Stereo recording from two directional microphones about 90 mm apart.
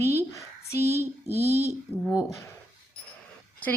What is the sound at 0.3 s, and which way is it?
Speech, 30° left (ahead or behind).